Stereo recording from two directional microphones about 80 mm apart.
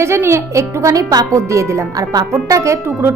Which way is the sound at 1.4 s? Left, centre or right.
Right.